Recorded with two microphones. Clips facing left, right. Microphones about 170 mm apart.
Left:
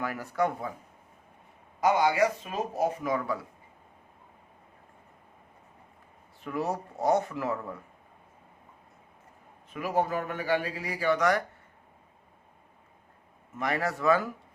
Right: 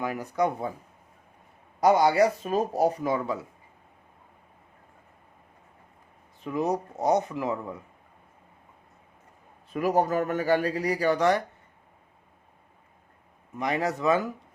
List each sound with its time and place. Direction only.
0.0 s speech: 20° right (ahead or behind)
1.8 s speech: 35° right (ahead or behind)
6.4 s speech: 20° right (ahead or behind)
9.7 s speech: 40° right (ahead or behind)
11.2 s speech: 25° right (ahead or behind)
13.6 s speech: 20° right (ahead or behind)